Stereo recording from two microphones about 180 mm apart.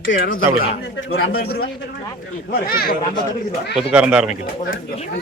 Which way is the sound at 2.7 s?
55° left (ahead or behind).